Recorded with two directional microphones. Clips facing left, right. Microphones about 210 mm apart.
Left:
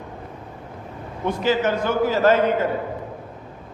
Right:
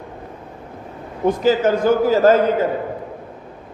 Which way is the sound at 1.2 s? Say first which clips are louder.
Right 5 dB; 40° right (ahead or behind).